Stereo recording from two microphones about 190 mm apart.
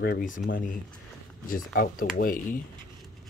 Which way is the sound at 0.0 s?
50° left (ahead or behind).